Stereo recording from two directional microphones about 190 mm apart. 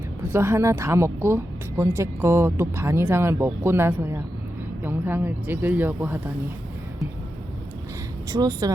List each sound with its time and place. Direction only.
0.3 s speech: 15° right (ahead or behind)
8.3 s speech: 20° right (ahead or behind)